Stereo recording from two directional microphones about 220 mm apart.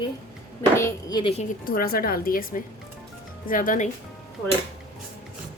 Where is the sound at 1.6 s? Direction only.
40° left (ahead or behind).